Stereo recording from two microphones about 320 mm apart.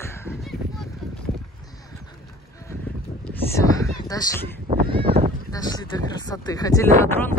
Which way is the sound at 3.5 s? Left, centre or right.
Centre.